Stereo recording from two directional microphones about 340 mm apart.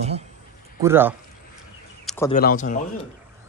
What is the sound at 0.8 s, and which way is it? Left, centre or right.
Speech, centre.